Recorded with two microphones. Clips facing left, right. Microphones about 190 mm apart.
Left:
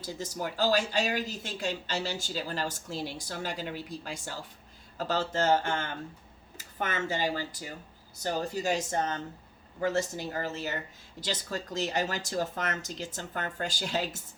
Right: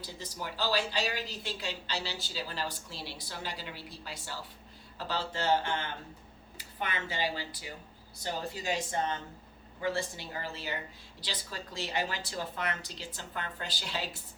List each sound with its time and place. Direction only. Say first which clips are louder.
0.0 s speech: left 6 dB; 45° left (ahead or behind)